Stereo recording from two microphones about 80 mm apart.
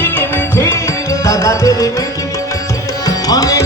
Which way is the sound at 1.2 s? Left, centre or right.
Left.